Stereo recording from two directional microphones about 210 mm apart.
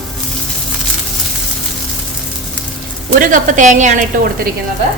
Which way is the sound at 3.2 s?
40° right (ahead or behind).